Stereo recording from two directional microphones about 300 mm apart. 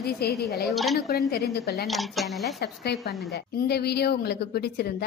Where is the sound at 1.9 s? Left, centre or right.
Centre.